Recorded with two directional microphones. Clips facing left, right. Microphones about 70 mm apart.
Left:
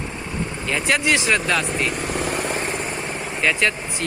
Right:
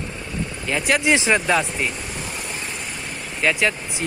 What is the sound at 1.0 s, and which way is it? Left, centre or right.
Speech, right.